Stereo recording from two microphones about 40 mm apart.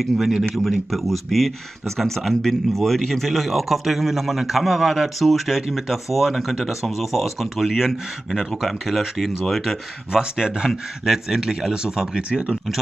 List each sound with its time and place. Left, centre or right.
0.0 s speech: centre
10.1 s speech: centre
12.2 s speech: right